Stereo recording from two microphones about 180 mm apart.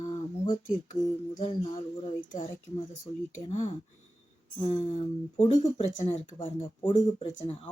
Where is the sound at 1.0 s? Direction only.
25° left (ahead or behind).